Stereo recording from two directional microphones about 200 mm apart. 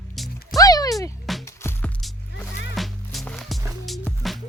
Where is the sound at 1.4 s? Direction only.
10° left (ahead or behind).